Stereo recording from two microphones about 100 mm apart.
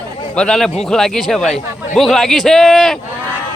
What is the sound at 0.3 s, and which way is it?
A man's voice, 5° left (ahead or behind).